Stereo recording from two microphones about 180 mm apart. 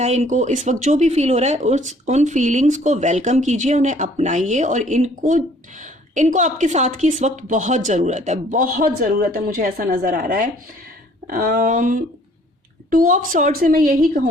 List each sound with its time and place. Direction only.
0.0 s a woman's voice: 40° right (ahead or behind)